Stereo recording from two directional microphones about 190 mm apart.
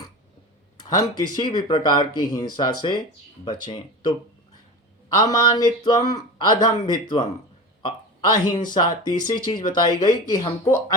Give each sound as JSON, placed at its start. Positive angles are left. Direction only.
{"t": 0.8, "sound": "speech", "side_deg": 20}
{"t": 5.2, "sound": "speech", "side_deg": 20}